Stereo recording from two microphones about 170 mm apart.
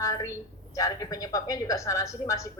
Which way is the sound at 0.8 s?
20° left (ahead or behind).